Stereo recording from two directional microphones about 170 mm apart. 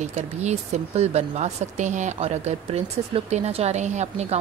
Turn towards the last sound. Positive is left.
turn(degrees=-40)  # may be behind; listen again after turning